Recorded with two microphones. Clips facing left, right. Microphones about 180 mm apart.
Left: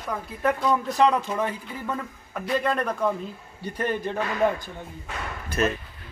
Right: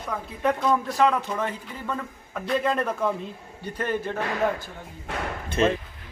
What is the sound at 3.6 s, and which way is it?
A man's voice, 15° left (ahead or behind).